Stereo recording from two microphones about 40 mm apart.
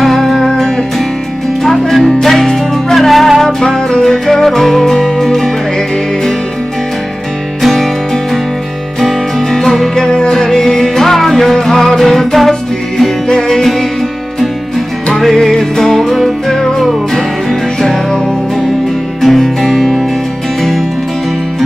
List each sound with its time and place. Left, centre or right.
0.0 s music: centre
7.6 s music: centre
9.0 s music: centre
15.1 s music: centre
19.2 s music: centre